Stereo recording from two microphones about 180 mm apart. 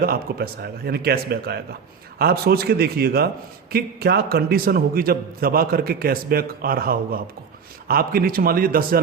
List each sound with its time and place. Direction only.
0.0 s a man's voice: 55° right (ahead or behind)